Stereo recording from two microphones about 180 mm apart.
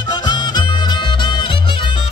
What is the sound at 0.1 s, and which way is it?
Music, 25° left (ahead or behind).